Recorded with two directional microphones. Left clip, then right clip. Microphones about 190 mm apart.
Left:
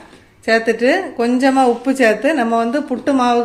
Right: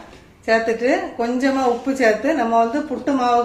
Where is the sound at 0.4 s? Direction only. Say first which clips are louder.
Left 3 dB; 55° left (ahead or behind).